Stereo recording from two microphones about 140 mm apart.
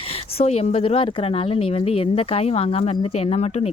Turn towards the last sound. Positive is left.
turn(degrees=50)  # may be behind; listen again after turning